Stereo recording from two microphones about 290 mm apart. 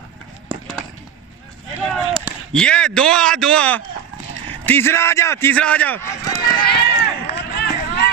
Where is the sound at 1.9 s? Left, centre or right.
Centre.